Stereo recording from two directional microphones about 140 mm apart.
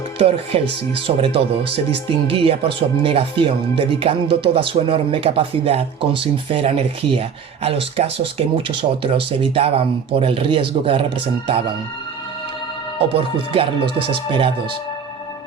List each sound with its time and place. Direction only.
0.2 s speech: 40° right (ahead or behind)
13.1 s speech: 40° right (ahead or behind)